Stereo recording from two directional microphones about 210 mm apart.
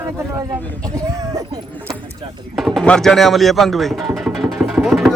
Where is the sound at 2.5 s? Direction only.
Centre (ahead or behind).